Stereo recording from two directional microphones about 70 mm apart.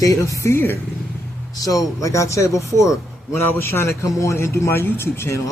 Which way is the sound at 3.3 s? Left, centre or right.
Left.